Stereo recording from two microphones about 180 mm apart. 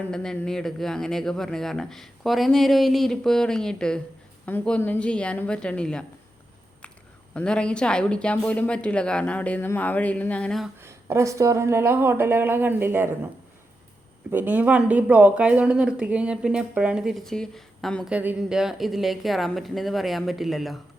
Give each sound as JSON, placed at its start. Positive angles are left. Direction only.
{"t": 0.1, "sound": "speech", "side_deg": 5}
{"t": 7.3, "sound": "speech", "side_deg": 5}
{"t": 10.8, "sound": "speech", "side_deg": -15}
{"t": 14.3, "sound": "speech", "side_deg": -10}